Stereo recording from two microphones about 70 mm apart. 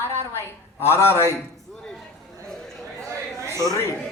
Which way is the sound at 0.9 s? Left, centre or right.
Left.